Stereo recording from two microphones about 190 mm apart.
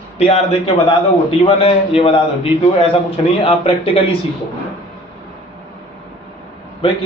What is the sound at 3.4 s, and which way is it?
Speech, 30° left (ahead or behind).